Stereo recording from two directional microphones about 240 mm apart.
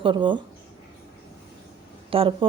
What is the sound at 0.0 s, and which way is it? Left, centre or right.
Speech, centre.